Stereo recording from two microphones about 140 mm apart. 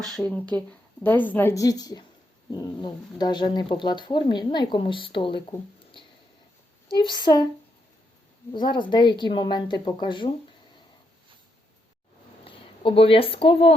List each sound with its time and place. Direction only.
0.0 s a woman's voice: 5° left (ahead or behind); by 7.4 s 30° left (ahead or behind)
8.5 s speech: 35° left (ahead or behind)
12.5 s speech: 40° left (ahead or behind)